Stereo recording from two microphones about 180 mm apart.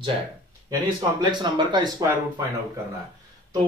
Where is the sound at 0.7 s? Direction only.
20° right (ahead or behind).